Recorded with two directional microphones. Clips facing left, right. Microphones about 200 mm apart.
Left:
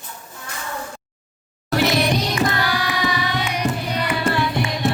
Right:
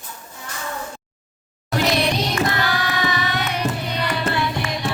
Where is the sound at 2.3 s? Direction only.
10° left (ahead or behind).